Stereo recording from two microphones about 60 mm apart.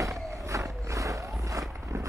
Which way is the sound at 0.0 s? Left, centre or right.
Right.